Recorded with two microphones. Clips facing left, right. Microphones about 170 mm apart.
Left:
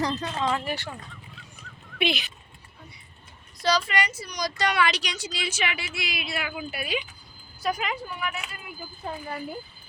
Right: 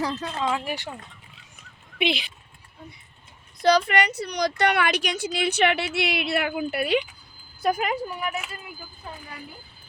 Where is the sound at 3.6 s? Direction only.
55° right (ahead or behind).